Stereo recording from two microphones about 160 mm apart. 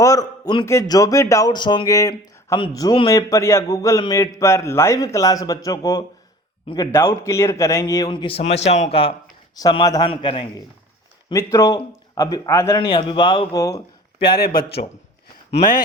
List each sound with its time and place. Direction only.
0.0 s speech: 20° left (ahead or behind); by 9.1 s 40° left (ahead or behind)
9.6 s speech: 25° left (ahead or behind)
11.3 s speech: 20° left (ahead or behind)
13.6 s speech: 20° left (ahead or behind)
14.3 s speech: 75° left (ahead or behind)